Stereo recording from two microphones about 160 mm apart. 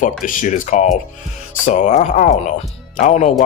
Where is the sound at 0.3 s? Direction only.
55° left (ahead or behind).